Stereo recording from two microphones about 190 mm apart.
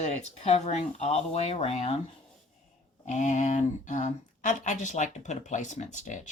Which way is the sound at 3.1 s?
40° left (ahead or behind).